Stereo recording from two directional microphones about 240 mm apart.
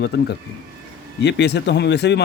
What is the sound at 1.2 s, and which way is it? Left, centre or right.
Speech, left.